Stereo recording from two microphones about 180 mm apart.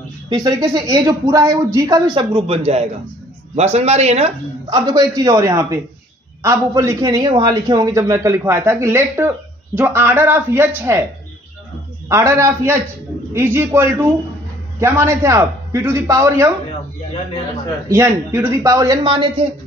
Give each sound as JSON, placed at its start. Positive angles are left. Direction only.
{"t": 0.3, "sound": "a man's voice", "side_deg": -25}
{"t": 4.6, "sound": "a man's voice", "side_deg": -25}
{"t": 12.1, "sound": "a man's voice", "side_deg": -15}
{"t": 17.8, "sound": "speech", "side_deg": -15}